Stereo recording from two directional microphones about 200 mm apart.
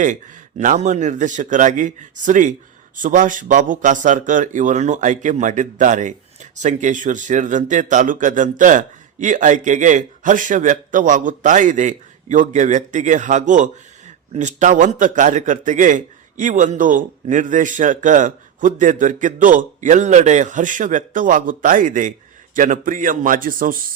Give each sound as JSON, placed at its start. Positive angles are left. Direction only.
{"t": 0.0, "sound": "a man's voice", "side_deg": -40}